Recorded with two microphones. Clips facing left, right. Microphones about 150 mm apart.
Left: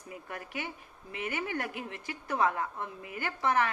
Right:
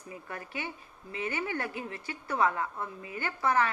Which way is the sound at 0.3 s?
15° left (ahead or behind).